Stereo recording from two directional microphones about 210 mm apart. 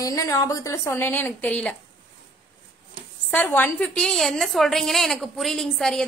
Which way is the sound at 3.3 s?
10° left (ahead or behind).